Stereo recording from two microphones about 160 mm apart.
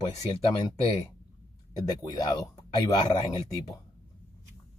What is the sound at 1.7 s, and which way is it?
Speech, 25° left (ahead or behind).